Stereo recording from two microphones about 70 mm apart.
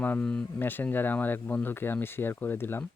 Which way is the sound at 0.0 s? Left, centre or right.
Left.